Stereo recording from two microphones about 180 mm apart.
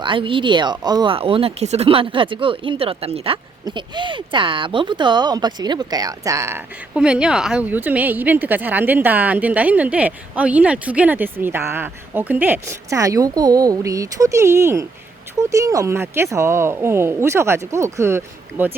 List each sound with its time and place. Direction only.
0.0 s speech: 30° right (ahead or behind)
6.9 s a woman's voice: 5° right (ahead or behind)